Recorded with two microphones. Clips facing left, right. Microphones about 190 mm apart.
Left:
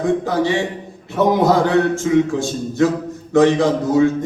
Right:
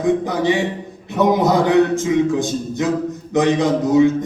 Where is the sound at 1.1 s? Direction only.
20° right (ahead or behind).